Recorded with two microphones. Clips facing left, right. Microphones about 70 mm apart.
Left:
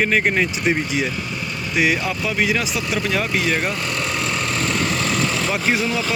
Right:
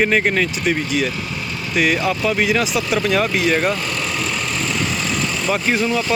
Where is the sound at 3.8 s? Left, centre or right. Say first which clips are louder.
Even; left.